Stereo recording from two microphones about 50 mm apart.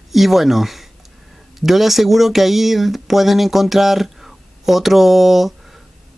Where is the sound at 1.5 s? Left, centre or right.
Centre.